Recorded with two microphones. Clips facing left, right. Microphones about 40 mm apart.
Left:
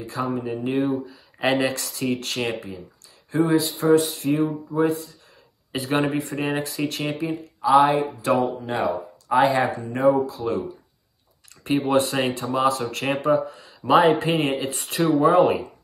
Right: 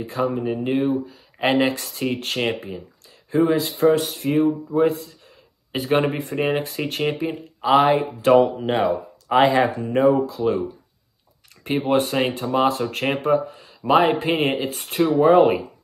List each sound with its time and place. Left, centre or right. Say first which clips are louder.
0.0 s speech: right 3 dB; right
3.5 s speech: even; right
7.6 s speech: even; right
11.8 s speech: right 2 dB; right